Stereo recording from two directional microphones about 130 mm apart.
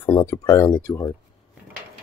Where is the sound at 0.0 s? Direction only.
20° left (ahead or behind).